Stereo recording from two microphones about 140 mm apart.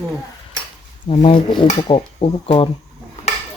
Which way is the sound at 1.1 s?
40° left (ahead or behind).